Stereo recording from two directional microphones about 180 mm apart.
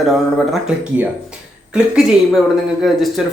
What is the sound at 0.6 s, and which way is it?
Speech, 5° right (ahead or behind).